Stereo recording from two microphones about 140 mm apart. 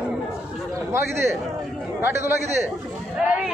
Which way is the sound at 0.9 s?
20° right (ahead or behind).